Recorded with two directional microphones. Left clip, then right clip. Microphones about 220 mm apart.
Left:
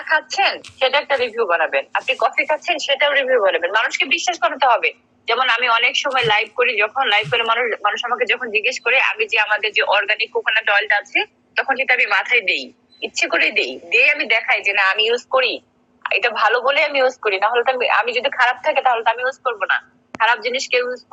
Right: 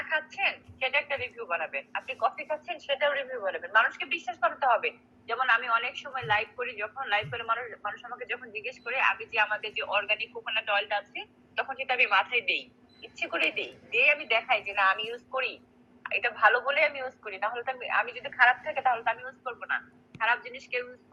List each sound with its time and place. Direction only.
0.1 s a woman's voice: 45° left (ahead or behind)